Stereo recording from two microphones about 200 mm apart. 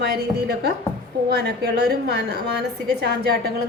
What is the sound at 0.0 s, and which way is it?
A woman's voice, 55° right (ahead or behind).